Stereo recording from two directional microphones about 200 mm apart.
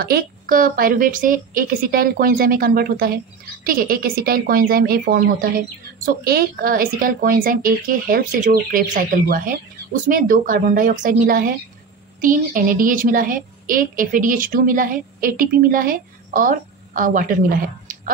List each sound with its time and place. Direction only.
0.0 s a woman's voice: 45° right (ahead or behind)